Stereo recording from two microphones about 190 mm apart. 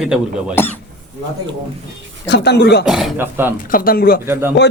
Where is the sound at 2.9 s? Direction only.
Centre (ahead or behind).